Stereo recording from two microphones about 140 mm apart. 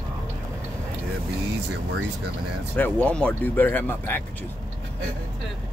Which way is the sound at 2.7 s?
10° left (ahead or behind).